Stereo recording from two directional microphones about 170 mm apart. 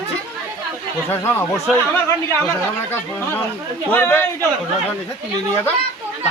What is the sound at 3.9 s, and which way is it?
Speech, 10° left (ahead or behind).